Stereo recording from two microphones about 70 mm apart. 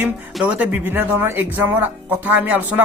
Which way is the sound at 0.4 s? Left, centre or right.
Right.